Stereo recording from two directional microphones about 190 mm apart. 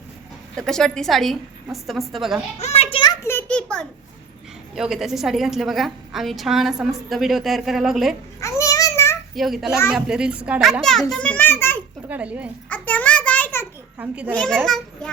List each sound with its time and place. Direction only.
0.5 s a woman's voice: 5° left (ahead or behind)
2.6 s a child's voice: 35° left (ahead or behind)
3.2 s a woman's voice: 10° left (ahead or behind)
8.4 s a sound: 15° left (ahead or behind)
9.3 s a woman's voice: centre (ahead or behind)
12.0 s a woman's voice: 10° right (ahead or behind)
12.6 s a sound: 10° left (ahead or behind)
14.0 s a woman's voice: 10° right (ahead or behind)
14.3 s a woman's voice: 5° left (ahead or behind)